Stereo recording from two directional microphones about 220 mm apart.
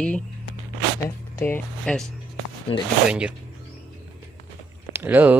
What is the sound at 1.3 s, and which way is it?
Speech, 10° left (ahead or behind).